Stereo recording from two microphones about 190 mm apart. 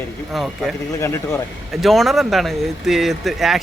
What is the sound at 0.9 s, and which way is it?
Speech, 15° left (ahead or behind).